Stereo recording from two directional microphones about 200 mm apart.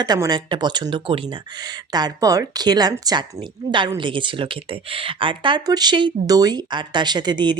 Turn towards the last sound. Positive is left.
turn(degrees=-20)  # may be behind; listen again after turning